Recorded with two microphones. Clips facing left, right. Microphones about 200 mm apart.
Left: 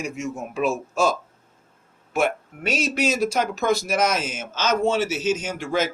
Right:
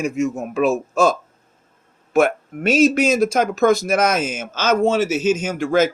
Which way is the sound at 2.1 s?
50° right (ahead or behind).